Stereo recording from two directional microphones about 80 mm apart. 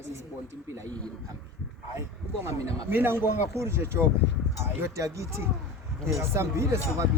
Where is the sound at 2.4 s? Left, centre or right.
Right.